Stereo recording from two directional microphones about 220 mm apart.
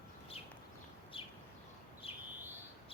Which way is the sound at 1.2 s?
25° left (ahead or behind).